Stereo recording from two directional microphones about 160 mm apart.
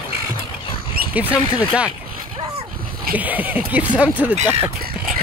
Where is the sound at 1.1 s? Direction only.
10° right (ahead or behind).